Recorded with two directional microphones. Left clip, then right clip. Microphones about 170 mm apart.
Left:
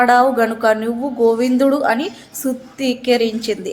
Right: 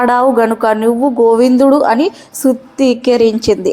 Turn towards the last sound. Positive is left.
turn(degrees=-35)  # may be behind; listen again after turning